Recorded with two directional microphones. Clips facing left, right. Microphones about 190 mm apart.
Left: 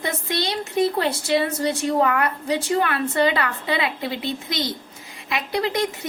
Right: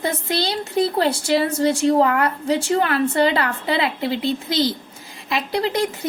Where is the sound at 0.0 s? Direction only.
30° right (ahead or behind).